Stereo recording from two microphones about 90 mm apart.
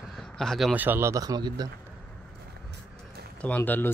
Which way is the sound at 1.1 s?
45° right (ahead or behind).